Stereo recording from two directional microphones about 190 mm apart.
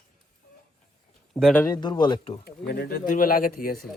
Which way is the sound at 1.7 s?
20° left (ahead or behind).